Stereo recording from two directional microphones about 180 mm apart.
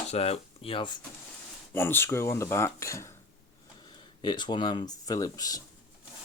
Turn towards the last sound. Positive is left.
turn(degrees=20)  # may be behind; listen again after turning